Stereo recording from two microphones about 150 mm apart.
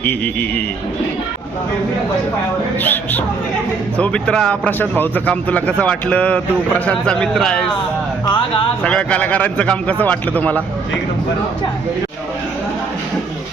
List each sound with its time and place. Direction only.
0.0 s speech: 10° left (ahead or behind)
2.7 s speech: 10° left (ahead or behind)
8.3 s speech: 35° left (ahead or behind)
8.8 s speech: 5° left (ahead or behind)